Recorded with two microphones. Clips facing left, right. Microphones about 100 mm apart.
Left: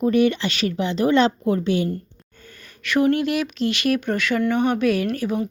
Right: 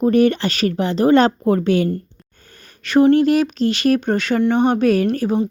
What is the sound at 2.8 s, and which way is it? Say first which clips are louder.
Speech: right 6 dB; 30° right (ahead or behind).